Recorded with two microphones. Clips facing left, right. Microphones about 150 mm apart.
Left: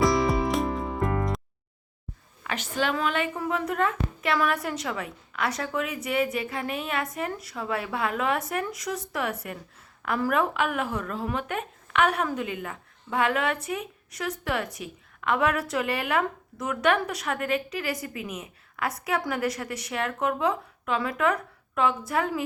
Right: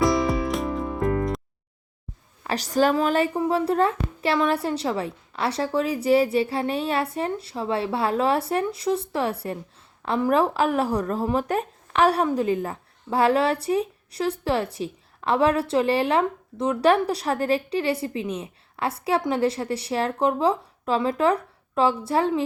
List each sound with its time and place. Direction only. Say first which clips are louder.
0.0 s music: right 1 dB; centre (ahead or behind)
2.4 s a woman's voice: right 7 dB; 35° right (ahead or behind)